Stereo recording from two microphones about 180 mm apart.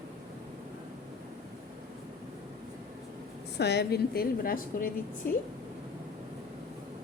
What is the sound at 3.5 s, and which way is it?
A woman's voice, 65° left (ahead or behind).